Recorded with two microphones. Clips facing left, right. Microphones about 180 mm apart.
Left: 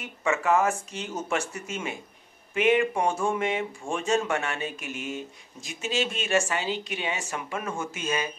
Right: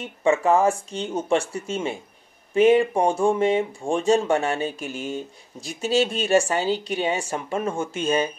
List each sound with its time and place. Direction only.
0.2 s speech: 30° right (ahead or behind)